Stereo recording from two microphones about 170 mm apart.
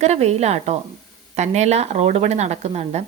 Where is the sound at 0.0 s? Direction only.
40° right (ahead or behind).